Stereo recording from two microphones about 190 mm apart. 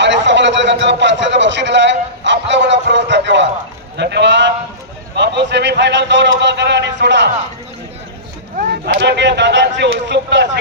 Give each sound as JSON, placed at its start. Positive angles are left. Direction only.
{"t": 0.0, "sound": "a sound", "side_deg": -70}
{"t": 3.9, "sound": "a man's voice", "side_deg": -65}
{"t": 9.0, "sound": "a man's voice", "side_deg": -65}